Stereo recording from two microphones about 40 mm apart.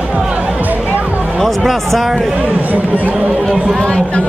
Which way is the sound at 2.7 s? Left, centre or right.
Right.